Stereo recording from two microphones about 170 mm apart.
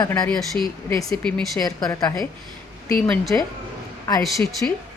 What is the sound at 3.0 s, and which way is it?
Speech, 5° left (ahead or behind).